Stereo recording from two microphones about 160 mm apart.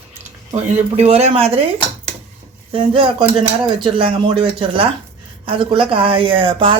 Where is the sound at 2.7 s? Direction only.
35° right (ahead or behind).